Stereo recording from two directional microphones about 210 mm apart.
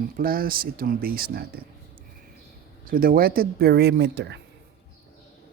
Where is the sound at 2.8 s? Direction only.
45° right (ahead or behind).